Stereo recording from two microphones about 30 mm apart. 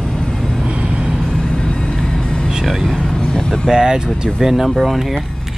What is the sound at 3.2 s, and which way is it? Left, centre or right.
Vehicle, left.